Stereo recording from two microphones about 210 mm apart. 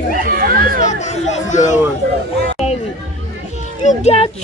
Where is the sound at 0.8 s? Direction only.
35° left (ahead or behind).